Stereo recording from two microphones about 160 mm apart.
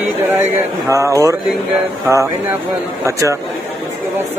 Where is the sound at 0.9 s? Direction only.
20° right (ahead or behind).